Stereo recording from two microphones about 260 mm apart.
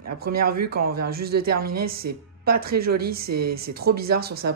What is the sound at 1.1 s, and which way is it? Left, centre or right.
Speech, right.